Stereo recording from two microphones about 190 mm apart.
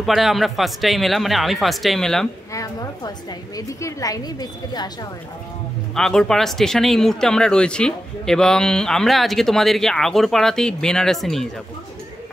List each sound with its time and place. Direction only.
0.0 s speech: centre (ahead or behind)
2.5 s a sound: 20° left (ahead or behind)
3.5 s a woman's voice: 15° left (ahead or behind)
5.9 s speech: 5° left (ahead or behind)